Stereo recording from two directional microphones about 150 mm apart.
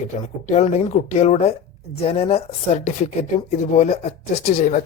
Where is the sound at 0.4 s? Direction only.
50° left (ahead or behind).